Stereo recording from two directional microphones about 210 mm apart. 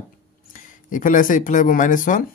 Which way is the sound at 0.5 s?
40° left (ahead or behind).